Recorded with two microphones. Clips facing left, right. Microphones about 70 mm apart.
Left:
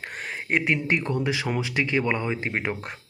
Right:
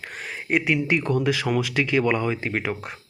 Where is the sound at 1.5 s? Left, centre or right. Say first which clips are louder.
Right 3 dB; left.